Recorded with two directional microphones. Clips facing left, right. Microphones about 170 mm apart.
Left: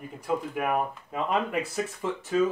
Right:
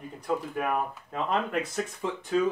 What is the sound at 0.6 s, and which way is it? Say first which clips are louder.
Speech: left 2 dB; 10° left (ahead or behind).